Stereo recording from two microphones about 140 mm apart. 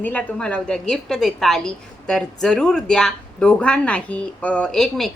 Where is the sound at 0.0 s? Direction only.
10° left (ahead or behind).